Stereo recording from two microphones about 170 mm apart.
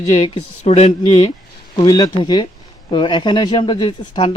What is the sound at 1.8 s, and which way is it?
Speech, 25° left (ahead or behind).